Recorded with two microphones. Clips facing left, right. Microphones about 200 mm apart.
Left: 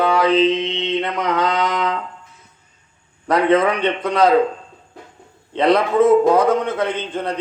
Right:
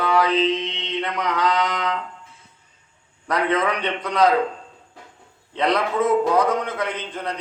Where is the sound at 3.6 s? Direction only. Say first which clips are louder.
Left 5 dB; 25° left (ahead or behind).